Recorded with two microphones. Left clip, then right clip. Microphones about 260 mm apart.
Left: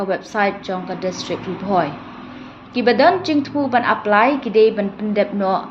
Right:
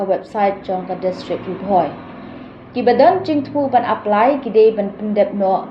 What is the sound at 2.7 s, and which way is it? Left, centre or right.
A woman's voice, left.